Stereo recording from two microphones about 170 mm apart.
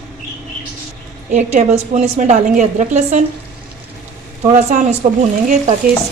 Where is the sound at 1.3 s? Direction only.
45° right (ahead or behind).